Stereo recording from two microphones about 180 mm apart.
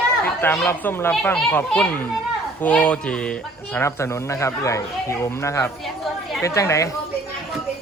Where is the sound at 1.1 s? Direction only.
5° left (ahead or behind).